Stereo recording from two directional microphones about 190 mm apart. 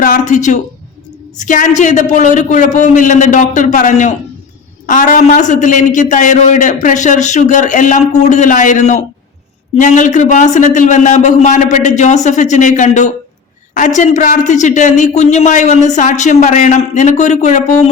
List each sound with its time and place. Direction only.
0.0 s speech: 40° left (ahead or behind)